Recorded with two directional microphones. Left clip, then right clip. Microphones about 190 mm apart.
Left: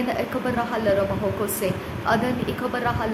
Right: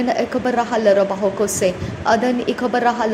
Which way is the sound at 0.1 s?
25° right (ahead or behind).